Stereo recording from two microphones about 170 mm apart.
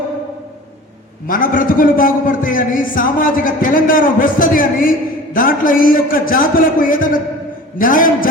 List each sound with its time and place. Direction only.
1.3 s a man's voice: 55° left (ahead or behind)